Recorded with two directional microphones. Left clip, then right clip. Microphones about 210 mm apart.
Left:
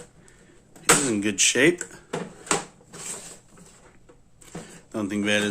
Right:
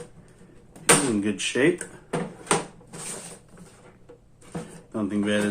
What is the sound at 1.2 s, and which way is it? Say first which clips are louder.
Speech: left 3 dB; 55° left (ahead or behind).